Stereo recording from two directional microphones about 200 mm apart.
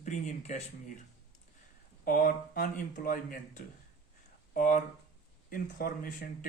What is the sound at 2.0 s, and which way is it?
Speech, 45° left (ahead or behind).